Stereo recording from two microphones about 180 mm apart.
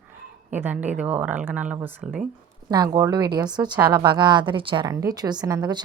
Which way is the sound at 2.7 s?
20° right (ahead or behind).